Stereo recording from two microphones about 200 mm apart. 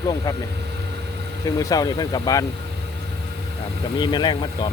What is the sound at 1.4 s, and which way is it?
Speech, 20° left (ahead or behind).